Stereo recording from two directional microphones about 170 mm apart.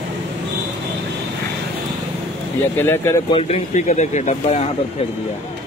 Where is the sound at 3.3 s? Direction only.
35° left (ahead or behind).